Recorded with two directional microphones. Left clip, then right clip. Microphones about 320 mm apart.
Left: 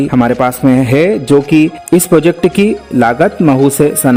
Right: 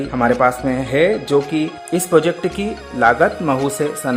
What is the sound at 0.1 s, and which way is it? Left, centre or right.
Speech, left.